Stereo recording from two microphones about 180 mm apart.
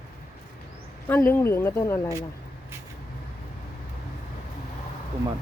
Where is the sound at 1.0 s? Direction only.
10° left (ahead or behind).